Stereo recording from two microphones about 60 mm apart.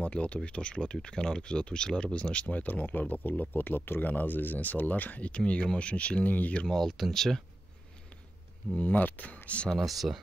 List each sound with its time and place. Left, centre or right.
0.0 s speech: left
6.7 s speech: centre
8.7 s speech: left
9.7 s speech: centre